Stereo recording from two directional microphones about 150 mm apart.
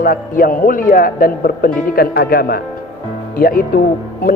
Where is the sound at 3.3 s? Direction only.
75° left (ahead or behind).